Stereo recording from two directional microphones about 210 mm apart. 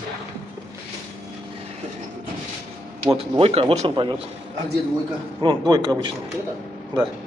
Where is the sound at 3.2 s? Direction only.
30° right (ahead or behind).